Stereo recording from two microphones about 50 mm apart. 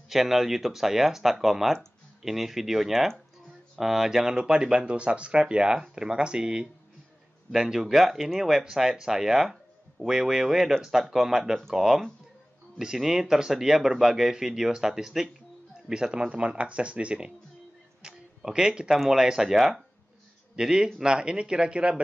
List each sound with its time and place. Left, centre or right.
0.1 s speech: centre
18.0 s a sound: centre
18.5 s speech: centre